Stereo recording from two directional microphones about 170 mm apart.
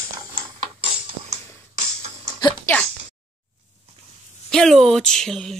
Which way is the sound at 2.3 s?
25° left (ahead or behind).